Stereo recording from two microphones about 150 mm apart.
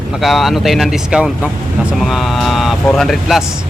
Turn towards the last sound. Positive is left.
turn(degrees=0)  # may be behind; listen again after turning